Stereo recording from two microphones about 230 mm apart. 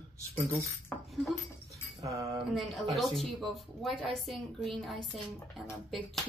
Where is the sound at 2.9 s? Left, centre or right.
Centre.